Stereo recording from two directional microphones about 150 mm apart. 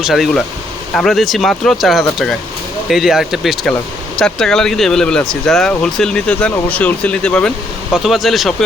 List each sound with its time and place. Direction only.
0.0 s speech: centre (ahead or behind)